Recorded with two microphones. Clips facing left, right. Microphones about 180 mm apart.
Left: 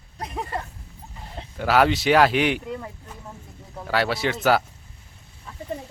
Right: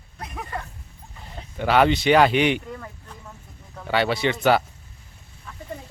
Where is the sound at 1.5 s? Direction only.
Centre (ahead or behind).